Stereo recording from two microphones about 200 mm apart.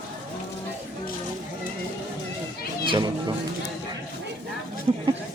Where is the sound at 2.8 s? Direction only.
25° right (ahead or behind).